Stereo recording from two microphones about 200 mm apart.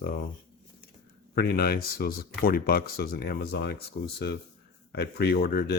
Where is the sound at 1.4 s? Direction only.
50° left (ahead or behind).